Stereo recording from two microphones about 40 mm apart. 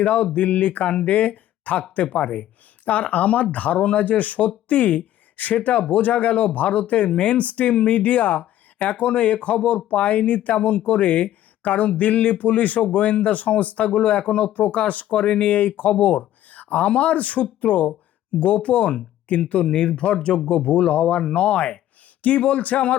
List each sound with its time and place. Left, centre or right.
0.0 s speech: left